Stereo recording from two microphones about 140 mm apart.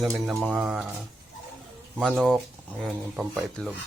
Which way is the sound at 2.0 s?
5° left (ahead or behind).